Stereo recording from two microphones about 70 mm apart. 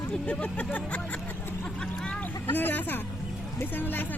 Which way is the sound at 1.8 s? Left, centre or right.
Centre.